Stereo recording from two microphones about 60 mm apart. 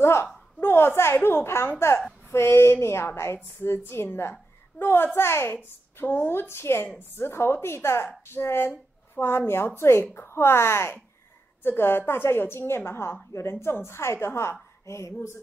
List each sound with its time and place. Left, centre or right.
0.0 s a woman's voice: left